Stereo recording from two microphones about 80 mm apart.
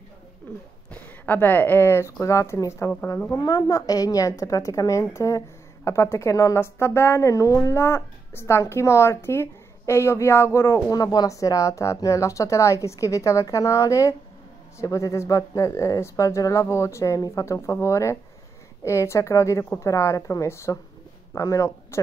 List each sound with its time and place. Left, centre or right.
0.8 s speech: left
3.3 s a woman's voice: left
6.6 s speech: left
10.9 s speech: left